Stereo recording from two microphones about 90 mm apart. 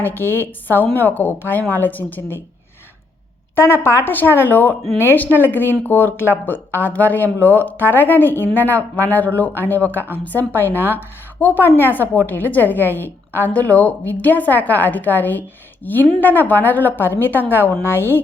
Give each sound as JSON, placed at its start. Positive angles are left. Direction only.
{"t": 0.0, "sound": "a woman's voice", "side_deg": 25}
{"t": 3.5, "sound": "a woman's voice", "side_deg": 25}